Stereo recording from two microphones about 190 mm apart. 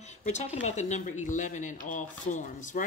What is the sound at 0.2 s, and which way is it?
Speech, 40° left (ahead or behind).